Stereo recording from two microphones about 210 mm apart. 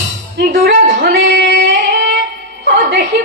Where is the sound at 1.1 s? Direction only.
65° right (ahead or behind).